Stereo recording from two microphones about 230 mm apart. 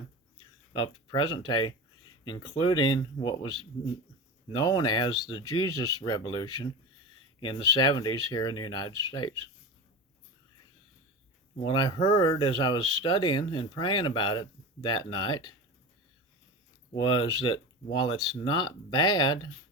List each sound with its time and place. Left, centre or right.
0.3 s speech: centre
11.6 s speech: centre
16.9 s speech: centre